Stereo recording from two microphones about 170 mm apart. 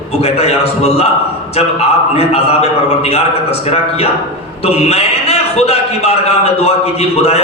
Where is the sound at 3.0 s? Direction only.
35° left (ahead or behind).